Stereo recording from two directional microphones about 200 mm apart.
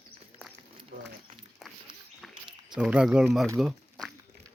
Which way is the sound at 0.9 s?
40° right (ahead or behind).